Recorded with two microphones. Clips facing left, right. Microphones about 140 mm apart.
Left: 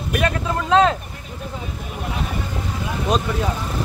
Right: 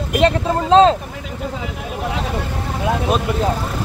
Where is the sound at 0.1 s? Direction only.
30° right (ahead or behind).